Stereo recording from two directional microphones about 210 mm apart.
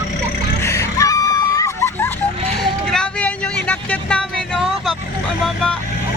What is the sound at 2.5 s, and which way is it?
Vehicle, centre (ahead or behind).